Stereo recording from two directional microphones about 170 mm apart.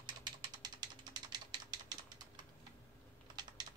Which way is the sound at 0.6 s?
25° right (ahead or behind).